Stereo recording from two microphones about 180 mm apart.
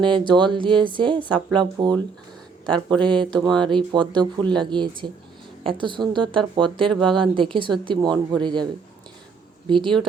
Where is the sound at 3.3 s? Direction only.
5° left (ahead or behind).